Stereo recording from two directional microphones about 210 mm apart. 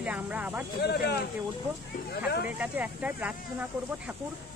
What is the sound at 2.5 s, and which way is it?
Speech, 10° right (ahead or behind).